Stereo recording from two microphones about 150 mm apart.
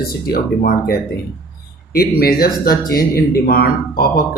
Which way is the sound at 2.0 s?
90° left.